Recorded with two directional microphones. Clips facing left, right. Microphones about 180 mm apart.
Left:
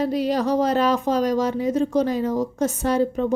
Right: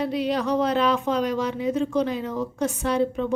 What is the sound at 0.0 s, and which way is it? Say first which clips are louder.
A woman's voice: left 3 dB; 40° left (ahead or behind).